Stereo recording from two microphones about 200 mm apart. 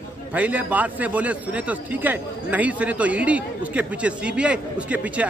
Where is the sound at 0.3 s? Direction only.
5° right (ahead or behind).